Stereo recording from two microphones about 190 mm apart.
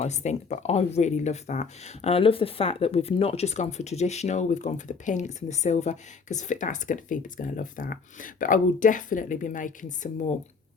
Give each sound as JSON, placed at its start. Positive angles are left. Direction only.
{"t": 0.0, "sound": "speech", "side_deg": 35}